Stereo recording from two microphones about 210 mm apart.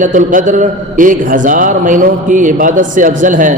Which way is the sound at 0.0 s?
35° right (ahead or behind).